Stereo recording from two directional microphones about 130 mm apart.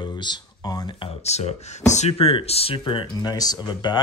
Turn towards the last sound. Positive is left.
turn(degrees=35)  # may be behind; listen again after turning